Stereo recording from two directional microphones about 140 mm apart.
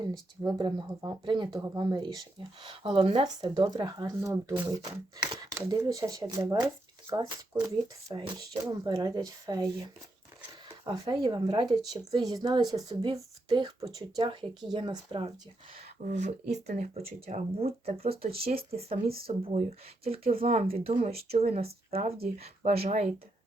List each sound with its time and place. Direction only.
0.0 s speech: 30° right (ahead or behind)
3.2 s speech: 30° right (ahead or behind)
16.0 s speech: 65° right (ahead or behind)
17.1 s speech: 45° right (ahead or behind)
19.0 s speech: 90° right
19.3 s speech: 50° right (ahead or behind)